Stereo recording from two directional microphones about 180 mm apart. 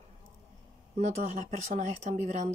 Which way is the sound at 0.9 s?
40° right (ahead or behind).